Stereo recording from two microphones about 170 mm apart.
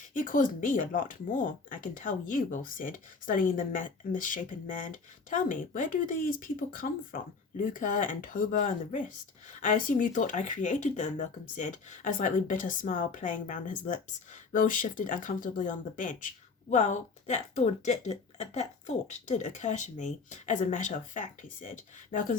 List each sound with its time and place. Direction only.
0.1 s speech: 50° left (ahead or behind)